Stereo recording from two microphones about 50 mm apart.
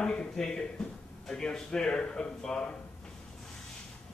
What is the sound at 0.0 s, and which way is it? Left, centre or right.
A man's voice, centre.